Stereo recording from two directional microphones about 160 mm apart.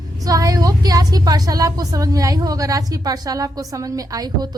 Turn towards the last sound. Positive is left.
turn(degrees=-25)  # may be behind; listen again after turning